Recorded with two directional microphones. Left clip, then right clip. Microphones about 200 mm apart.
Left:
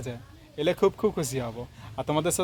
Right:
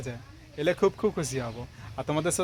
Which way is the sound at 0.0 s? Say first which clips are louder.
Left 1 dB; centre (ahead or behind).